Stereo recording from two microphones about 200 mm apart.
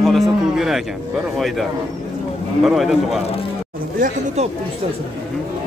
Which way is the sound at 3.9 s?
40° right (ahead or behind).